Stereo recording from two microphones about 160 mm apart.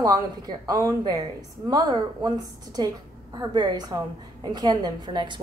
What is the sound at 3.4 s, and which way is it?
A woman's voice, 25° right (ahead or behind).